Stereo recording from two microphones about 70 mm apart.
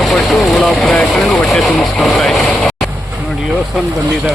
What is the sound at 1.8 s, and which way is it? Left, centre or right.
Vehicle, centre.